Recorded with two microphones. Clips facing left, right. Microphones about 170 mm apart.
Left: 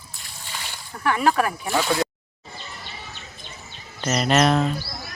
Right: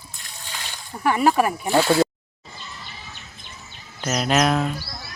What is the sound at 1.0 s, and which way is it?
Speech, 10° right (ahead or behind).